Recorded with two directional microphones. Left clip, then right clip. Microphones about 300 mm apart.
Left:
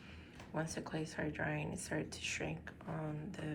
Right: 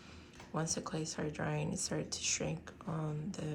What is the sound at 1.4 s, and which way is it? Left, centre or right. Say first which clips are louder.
Speech: right 2 dB; right.